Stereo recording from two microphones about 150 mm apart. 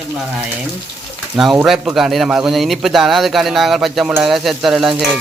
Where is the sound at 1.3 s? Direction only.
Centre (ahead or behind).